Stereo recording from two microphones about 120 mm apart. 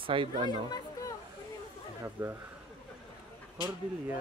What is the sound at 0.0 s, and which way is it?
Speech, 45° right (ahead or behind).